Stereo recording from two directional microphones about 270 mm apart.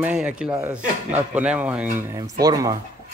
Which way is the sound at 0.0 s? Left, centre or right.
Centre.